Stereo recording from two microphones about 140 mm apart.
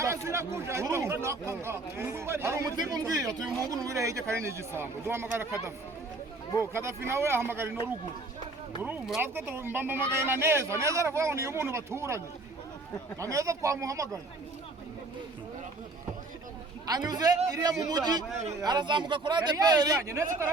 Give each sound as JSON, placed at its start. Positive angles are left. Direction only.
{"t": 0.0, "sound": "speech", "side_deg": -20}
{"t": 6.7, "sound": "speech", "side_deg": -15}
{"t": 9.2, "sound": "speech", "side_deg": -15}
{"t": 16.8, "sound": "speech", "side_deg": -30}